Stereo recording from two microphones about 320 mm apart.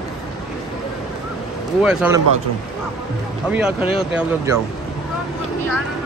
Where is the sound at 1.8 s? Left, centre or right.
Centre.